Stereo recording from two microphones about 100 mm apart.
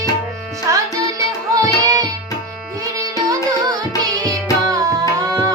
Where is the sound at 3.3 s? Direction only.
35° right (ahead or behind).